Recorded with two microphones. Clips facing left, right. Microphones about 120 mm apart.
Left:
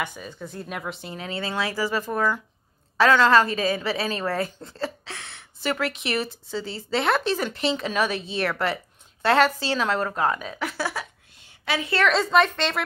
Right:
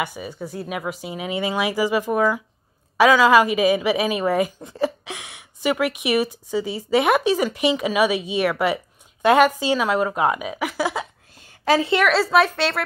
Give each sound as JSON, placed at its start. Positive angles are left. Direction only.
{"t": 0.0, "sound": "a woman's voice", "side_deg": -10}
{"t": 11.6, "sound": "a woman's voice", "side_deg": -40}
{"t": 12.1, "sound": "a woman's voice", "side_deg": -5}